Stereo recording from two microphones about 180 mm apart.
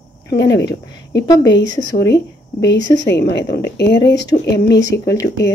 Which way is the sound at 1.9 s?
65° left (ahead or behind).